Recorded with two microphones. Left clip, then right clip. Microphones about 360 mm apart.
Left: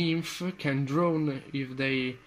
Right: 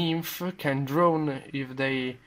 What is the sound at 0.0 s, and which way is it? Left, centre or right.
Speech, right.